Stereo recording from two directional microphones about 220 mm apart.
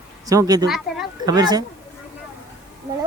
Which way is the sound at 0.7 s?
Centre (ahead or behind).